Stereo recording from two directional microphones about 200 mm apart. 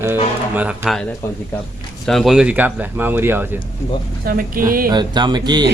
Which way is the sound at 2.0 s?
Centre (ahead or behind).